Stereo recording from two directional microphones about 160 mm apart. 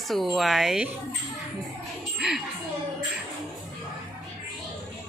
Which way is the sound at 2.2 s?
5° right (ahead or behind).